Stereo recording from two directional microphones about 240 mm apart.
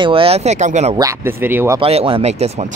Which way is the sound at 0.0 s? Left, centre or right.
Right.